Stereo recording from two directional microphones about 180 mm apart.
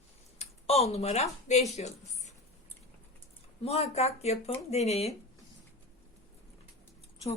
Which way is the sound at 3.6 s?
35° left (ahead or behind).